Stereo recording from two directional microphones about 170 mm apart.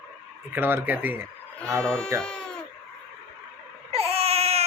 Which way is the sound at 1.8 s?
5° left (ahead or behind).